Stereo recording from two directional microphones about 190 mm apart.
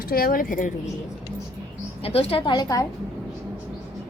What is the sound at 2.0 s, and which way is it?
Speech, 30° left (ahead or behind).